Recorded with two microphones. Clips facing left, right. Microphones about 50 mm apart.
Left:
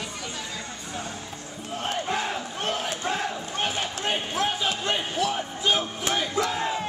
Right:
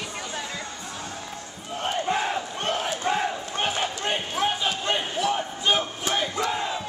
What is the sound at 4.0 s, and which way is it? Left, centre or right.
Speech, centre.